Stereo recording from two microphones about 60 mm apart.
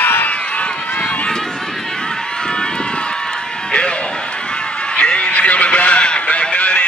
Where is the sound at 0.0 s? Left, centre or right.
Left.